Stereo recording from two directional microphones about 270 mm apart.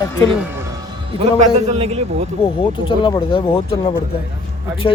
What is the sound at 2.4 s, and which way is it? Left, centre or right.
Speech, centre.